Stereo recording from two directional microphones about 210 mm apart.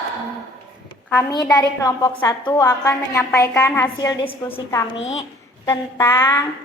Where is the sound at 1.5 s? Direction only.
20° left (ahead or behind).